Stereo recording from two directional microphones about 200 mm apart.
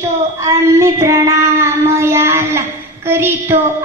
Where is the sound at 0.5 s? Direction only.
15° right (ahead or behind).